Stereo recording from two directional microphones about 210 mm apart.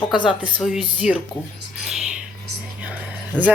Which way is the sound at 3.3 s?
5° left (ahead or behind).